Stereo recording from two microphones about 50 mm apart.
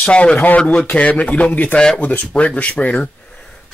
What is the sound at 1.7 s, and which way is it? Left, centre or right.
Speech, centre.